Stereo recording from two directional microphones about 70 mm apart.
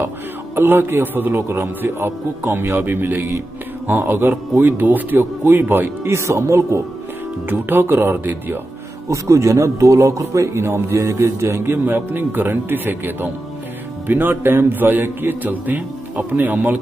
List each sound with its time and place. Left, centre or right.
0.6 s speech: right
2.8 s speech: right
7.4 s speech: right
9.1 s a man's voice: right